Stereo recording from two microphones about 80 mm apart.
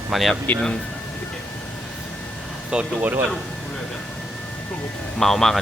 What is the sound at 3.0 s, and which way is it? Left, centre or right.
Speech, right.